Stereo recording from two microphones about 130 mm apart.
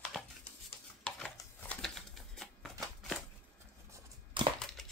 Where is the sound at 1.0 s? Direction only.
5° left (ahead or behind).